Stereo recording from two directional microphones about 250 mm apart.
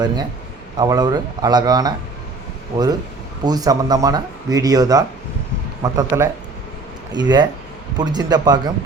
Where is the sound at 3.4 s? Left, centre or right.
Centre.